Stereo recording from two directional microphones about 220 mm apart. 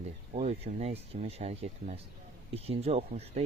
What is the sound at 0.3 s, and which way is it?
Speech, 30° right (ahead or behind).